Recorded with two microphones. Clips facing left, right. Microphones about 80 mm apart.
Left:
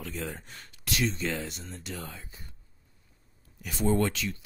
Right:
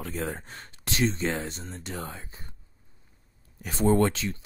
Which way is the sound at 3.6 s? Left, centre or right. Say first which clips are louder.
Right 4 dB; right.